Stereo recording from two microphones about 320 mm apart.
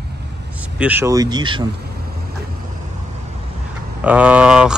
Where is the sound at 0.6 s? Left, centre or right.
Centre.